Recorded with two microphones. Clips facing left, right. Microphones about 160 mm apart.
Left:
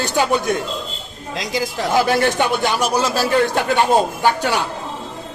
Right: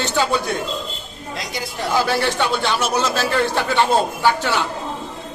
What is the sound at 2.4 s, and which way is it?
Speech, 15° left (ahead or behind).